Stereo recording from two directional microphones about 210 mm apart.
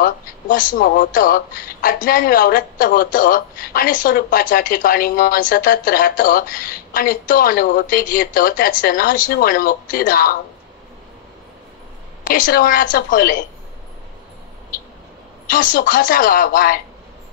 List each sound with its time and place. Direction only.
0.0 s speech: 40° left (ahead or behind)
12.3 s speech: 40° left (ahead or behind)
15.5 s speech: 40° left (ahead or behind)